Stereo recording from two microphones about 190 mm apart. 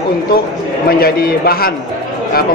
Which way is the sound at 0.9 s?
55° left (ahead or behind).